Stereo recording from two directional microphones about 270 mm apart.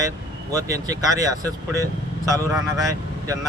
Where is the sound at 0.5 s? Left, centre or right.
Centre.